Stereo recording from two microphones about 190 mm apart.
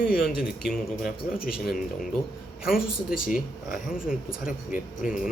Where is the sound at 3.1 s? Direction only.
50° left (ahead or behind).